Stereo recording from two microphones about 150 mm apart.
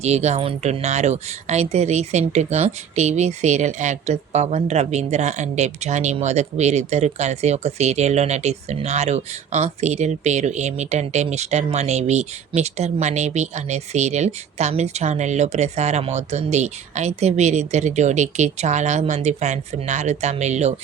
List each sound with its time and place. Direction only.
0.0 s speech: 50° right (ahead or behind)